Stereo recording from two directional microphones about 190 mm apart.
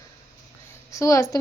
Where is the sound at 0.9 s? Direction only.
15° left (ahead or behind).